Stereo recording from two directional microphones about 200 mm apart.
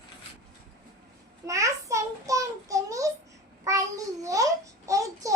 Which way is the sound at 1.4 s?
15° right (ahead or behind).